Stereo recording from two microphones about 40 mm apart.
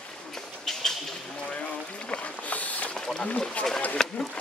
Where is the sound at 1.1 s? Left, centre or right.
Left.